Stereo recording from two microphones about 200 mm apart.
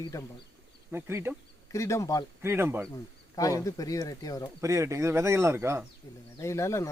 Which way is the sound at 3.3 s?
15° left (ahead or behind).